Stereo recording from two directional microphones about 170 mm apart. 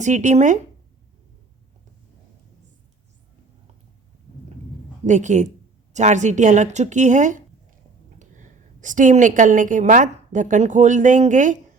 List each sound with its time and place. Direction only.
0.0 s speech: 45° right (ahead or behind)
5.0 s a woman's voice: 45° right (ahead or behind)